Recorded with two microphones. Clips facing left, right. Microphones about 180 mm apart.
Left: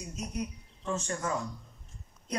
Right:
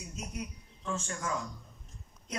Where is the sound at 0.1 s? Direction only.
40° left (ahead or behind).